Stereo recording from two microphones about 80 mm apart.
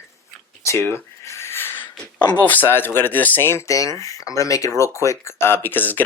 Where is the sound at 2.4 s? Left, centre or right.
Left.